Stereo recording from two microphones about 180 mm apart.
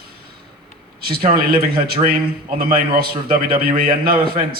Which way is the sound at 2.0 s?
30° right (ahead or behind).